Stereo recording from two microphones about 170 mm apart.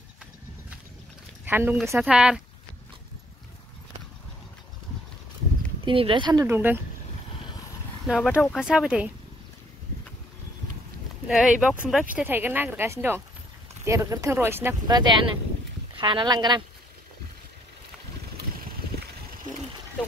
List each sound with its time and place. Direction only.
1.4 s speech: 10° right (ahead or behind)
5.9 s speech: 30° right (ahead or behind)
6.4 s speech: 10° right (ahead or behind)
8.0 s speech: centre (ahead or behind)
11.2 s speech: 5° right (ahead or behind)
14.9 s speech: 25° right (ahead or behind)